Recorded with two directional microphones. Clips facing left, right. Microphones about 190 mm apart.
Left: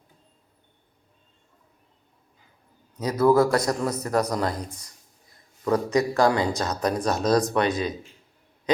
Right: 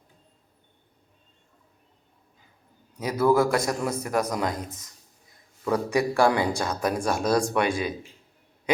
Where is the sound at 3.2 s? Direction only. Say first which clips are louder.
Left 2 dB; 25° left (ahead or behind).